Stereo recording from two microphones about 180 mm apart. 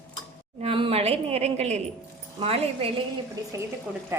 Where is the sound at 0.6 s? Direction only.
30° right (ahead or behind).